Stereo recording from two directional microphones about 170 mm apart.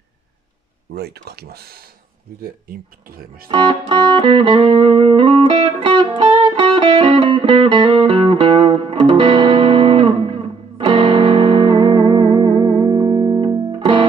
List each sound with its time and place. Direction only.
0.9 s speech: 70° right (ahead or behind)
3.4 s music: 30° right (ahead or behind)